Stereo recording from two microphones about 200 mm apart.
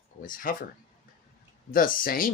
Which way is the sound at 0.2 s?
45° left (ahead or behind).